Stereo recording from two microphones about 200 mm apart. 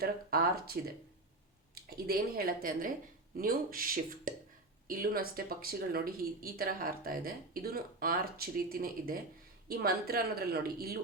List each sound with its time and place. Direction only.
0.0 s speech: 50° right (ahead or behind)